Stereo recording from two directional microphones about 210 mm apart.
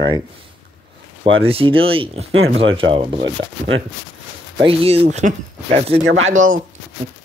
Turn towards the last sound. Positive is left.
turn(degrees=-40)  # may be behind; listen again after turning